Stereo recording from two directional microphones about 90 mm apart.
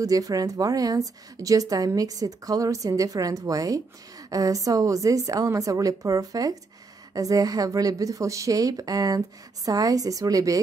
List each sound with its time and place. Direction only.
0.0 s a woman's voice: 40° right (ahead or behind)